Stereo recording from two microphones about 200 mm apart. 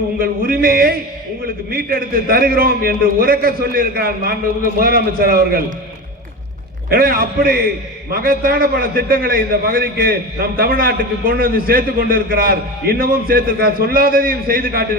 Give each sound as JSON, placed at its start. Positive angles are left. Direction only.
{"t": 0.2, "sound": "a man's voice", "side_deg": -45}
{"t": 6.9, "sound": "a man's voice", "side_deg": -45}